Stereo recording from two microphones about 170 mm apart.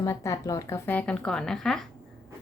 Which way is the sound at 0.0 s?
20° left (ahead or behind).